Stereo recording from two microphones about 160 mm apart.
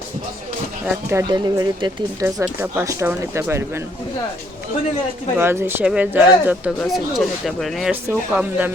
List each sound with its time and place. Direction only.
1.1 s speech: 25° right (ahead or behind)
2.2 s speech: 15° right (ahead or behind)
5.4 s speech: 15° right (ahead or behind)